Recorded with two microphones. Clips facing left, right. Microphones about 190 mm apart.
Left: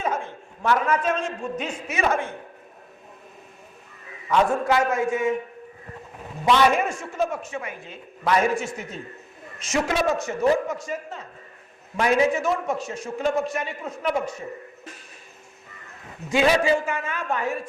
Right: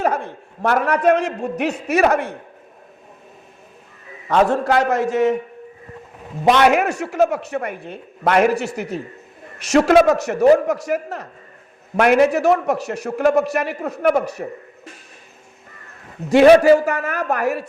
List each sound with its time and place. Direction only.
0.2 s a man's voice: 60° right (ahead or behind)
4.3 s a man's voice: 70° right (ahead or behind)
6.4 s a man's voice: 70° right (ahead or behind)
16.3 s a man's voice: 60° right (ahead or behind)